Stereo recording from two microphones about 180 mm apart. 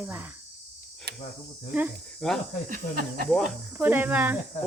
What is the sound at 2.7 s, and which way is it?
Speech, 50° right (ahead or behind).